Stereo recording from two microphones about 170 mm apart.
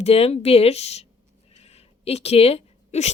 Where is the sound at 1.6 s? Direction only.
35° left (ahead or behind).